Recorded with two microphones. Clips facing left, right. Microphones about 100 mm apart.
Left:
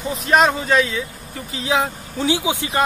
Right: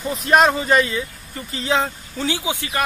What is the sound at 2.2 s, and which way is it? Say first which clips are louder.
Speech: left 4 dB; 20° left (ahead or behind).